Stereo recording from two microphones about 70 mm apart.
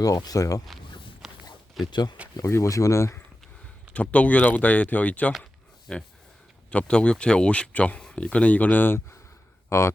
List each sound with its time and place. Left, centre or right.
0.0 s speech: left
1.2 s a sound: centre
1.8 s speech: left
2.4 s speech: left
3.9 s speech: centre
5.9 s speech: centre; by 9.1 s left
9.6 s speech: left